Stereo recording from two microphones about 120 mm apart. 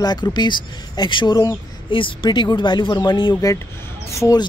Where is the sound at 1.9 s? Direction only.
45° left (ahead or behind); by 4.4 s 25° left (ahead or behind).